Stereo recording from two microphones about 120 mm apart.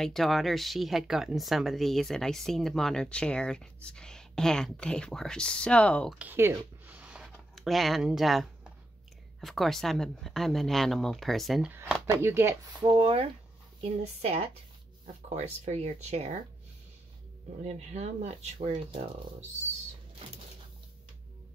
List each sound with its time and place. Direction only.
0.0 s speech: 5° left (ahead or behind)
6.1 s speech: 15° right (ahead or behind)
7.0 s a sound: 5° right (ahead or behind)
9.4 s speech: centre (ahead or behind)
12.2 s speech: 20° right (ahead or behind)
12.8 s a woman's voice: 45° right (ahead or behind)
15.2 s speech: 70° right (ahead or behind)
17.6 s speech: 65° right (ahead or behind)